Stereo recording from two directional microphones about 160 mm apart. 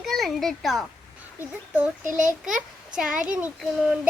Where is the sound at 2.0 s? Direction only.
55° right (ahead or behind).